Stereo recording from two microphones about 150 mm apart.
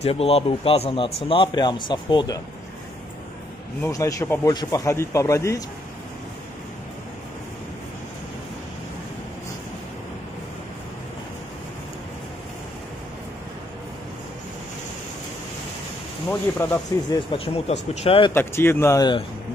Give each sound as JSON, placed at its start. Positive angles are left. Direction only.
{"t": 0.0, "sound": "a man's voice", "side_deg": 40}
{"t": 3.8, "sound": "a man's voice", "side_deg": 20}
{"t": 16.3, "sound": "speech", "side_deg": 10}
{"t": 17.3, "sound": "a man's voice", "side_deg": 40}
{"t": 18.3, "sound": "speech", "side_deg": 15}